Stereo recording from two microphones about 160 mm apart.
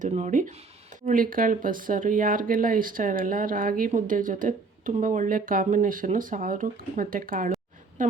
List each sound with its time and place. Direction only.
0.0 s speech: 50° right (ahead or behind)